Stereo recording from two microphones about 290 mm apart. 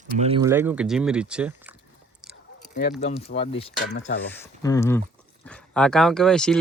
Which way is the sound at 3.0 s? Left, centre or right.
Left.